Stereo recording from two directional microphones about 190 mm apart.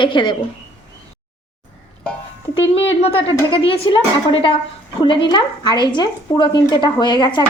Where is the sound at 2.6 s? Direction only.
30° left (ahead or behind).